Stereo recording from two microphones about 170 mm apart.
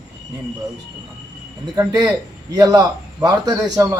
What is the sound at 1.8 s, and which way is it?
A man's voice, 25° right (ahead or behind).